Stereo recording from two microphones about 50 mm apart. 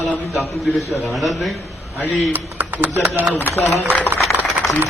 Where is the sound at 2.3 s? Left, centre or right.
Right.